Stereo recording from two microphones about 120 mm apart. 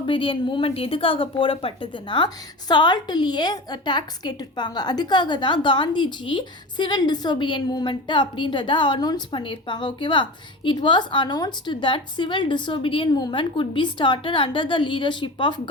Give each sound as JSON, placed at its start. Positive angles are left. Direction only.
{"t": 0.0, "sound": "a woman's voice", "side_deg": 45}